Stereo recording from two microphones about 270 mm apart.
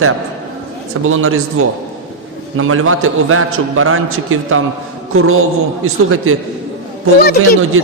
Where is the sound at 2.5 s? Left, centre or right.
Right.